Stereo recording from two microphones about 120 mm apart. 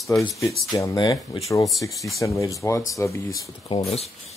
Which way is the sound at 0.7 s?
35° left (ahead or behind).